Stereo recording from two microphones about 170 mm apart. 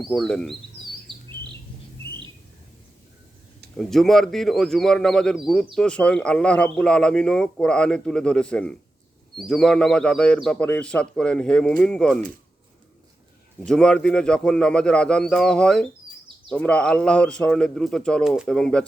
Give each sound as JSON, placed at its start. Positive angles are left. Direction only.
{"t": 0.0, "sound": "a man's voice", "side_deg": 0}
{"t": 1.1, "sound": "bird", "side_deg": -30}
{"t": 3.8, "sound": "a man's voice", "side_deg": 0}
{"t": 13.7, "sound": "a man's voice", "side_deg": 5}